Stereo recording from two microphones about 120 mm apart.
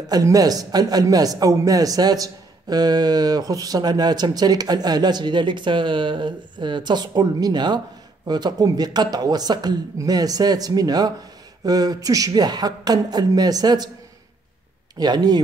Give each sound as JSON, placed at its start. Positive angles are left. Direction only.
{"t": 0.1, "sound": "a man's voice", "side_deg": -30}
{"t": 15.0, "sound": "a man's voice", "side_deg": -35}